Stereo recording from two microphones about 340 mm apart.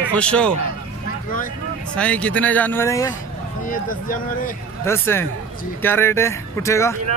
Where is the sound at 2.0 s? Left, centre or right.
Centre.